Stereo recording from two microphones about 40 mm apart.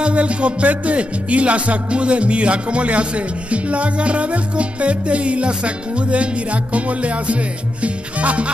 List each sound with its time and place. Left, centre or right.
0.0 s music: right